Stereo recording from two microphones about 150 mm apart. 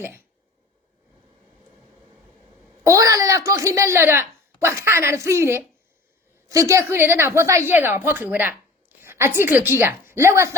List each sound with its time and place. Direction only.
2.8 s a woman's voice: 20° right (ahead or behind)